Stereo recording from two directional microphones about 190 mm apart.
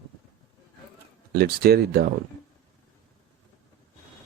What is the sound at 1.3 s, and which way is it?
Speech, 55° right (ahead or behind).